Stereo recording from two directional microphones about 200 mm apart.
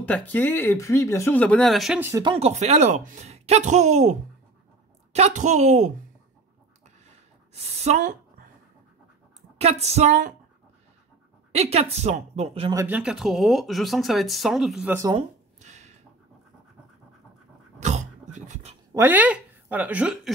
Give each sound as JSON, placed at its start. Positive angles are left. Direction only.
{"t": 0.0, "sound": "speech", "side_deg": 10}
{"t": 2.0, "sound": "speech", "side_deg": -15}
{"t": 2.3, "sound": "speech", "side_deg": -30}
{"t": 7.5, "sound": "speech", "side_deg": -30}
{"t": 9.6, "sound": "speech", "side_deg": -30}
{"t": 11.5, "sound": "speech", "side_deg": -30}
{"t": 12.7, "sound": "speech", "side_deg": -10}
{"t": 15.0, "sound": "speech", "side_deg": -20}
{"t": 15.6, "sound": "a sound", "side_deg": -35}
{"t": 17.8, "sound": "a sound", "side_deg": -35}
{"t": 18.9, "sound": "speech", "side_deg": -10}